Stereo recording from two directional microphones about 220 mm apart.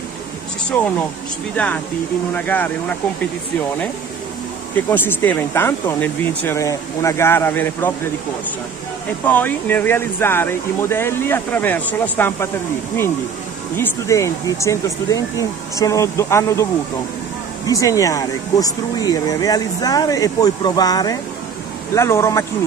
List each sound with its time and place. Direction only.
2.3 s speech: 5° left (ahead or behind)
4.7 s speech: 10° left (ahead or behind)
9.2 s speech: 10° left (ahead or behind)
13.7 s speech: 15° left (ahead or behind)
17.6 s speech: 15° left (ahead or behind)